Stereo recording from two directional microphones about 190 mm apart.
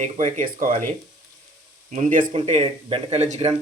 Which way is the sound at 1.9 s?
40° right (ahead or behind).